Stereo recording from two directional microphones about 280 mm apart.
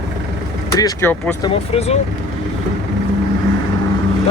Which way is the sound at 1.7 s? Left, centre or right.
Left.